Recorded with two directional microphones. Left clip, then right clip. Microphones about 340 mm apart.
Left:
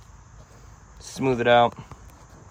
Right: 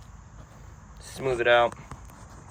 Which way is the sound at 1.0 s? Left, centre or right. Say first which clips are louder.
Left 2 dB; centre.